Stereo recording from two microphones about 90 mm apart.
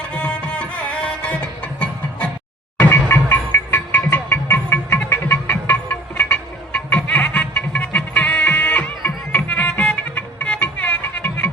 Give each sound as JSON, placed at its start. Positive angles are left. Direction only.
{"t": 0.1, "sound": "music", "side_deg": 10}
{"t": 2.7, "sound": "music", "side_deg": 25}